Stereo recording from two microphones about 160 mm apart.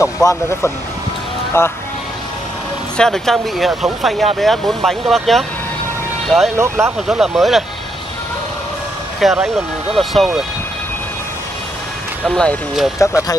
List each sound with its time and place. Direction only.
0.0 s speech: 20° left (ahead or behind)
3.0 s speech: centre (ahead or behind)
6.5 s speech: 15° right (ahead or behind)
7.1 s speech: centre (ahead or behind)
9.2 s speech: centre (ahead or behind)
12.3 s speech: 5° left (ahead or behind)